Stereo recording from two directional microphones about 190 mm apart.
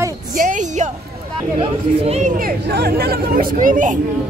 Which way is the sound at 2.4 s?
50° right (ahead or behind).